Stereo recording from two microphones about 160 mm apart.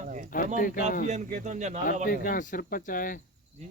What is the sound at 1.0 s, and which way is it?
Speech, 50° right (ahead or behind).